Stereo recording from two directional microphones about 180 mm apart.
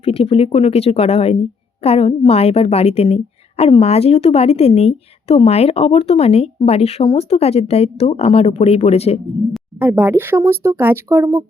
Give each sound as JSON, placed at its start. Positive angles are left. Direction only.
{"t": 0.0, "sound": "a woman's voice", "side_deg": 35}
{"t": 9.7, "sound": "speech", "side_deg": -10}